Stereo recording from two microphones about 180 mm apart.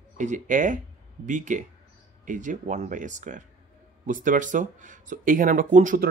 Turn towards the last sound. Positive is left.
turn(degrees=-45)  # may be behind; listen again after turning